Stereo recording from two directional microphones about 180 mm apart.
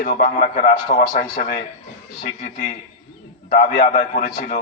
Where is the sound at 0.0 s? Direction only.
55° left (ahead or behind).